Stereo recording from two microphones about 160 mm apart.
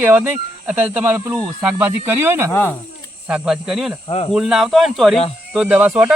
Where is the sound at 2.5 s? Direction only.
15° left (ahead or behind).